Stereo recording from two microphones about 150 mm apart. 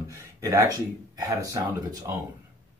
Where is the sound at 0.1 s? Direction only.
20° right (ahead or behind).